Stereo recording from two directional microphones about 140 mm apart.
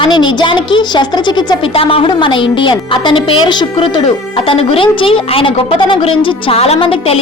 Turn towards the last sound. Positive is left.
turn(degrees=45)  # may be behind; listen again after turning